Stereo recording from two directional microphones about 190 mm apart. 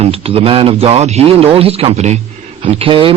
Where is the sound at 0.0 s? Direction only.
30° right (ahead or behind).